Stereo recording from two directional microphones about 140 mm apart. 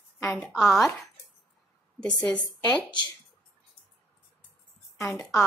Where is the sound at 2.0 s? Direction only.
5° left (ahead or behind).